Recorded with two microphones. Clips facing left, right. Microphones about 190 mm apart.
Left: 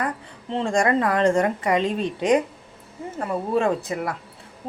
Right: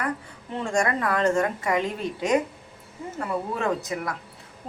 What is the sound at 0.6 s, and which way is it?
Speech, 30° left (ahead or behind).